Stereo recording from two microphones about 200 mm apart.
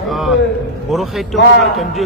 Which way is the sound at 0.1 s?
Centre (ahead or behind).